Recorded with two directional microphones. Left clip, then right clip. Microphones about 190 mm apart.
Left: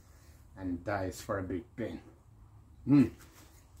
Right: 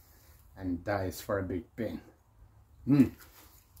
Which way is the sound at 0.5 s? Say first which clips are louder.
Right 2 dB; 30° right (ahead or behind).